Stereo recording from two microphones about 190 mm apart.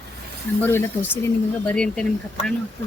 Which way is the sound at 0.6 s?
10° left (ahead or behind).